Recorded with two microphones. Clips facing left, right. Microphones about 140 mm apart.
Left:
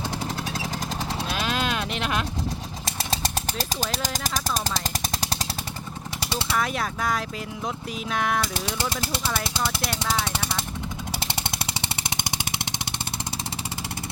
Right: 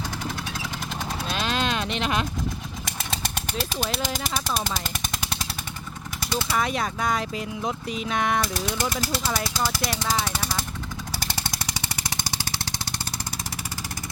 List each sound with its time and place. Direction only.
1.3 s a sound: 5° left (ahead or behind)
2.8 s speech: 35° left (ahead or behind)
5.2 s jackhammer: 35° left (ahead or behind)
6.6 s speech: centre (ahead or behind)
8.5 s speech: 25° left (ahead or behind)
9.8 s speech: centre (ahead or behind)
10.2 s jackhammer: 25° left (ahead or behind)